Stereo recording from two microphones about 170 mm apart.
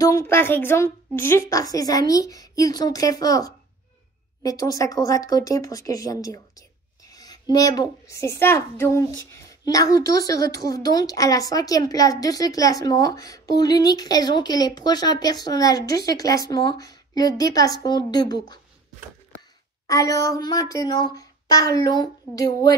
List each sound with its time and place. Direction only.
0.0 s a woman's voice: 15° left (ahead or behind)
19.9 s a woman's voice: 20° left (ahead or behind)